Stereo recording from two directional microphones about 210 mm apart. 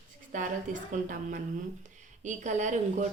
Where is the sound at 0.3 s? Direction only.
40° right (ahead or behind).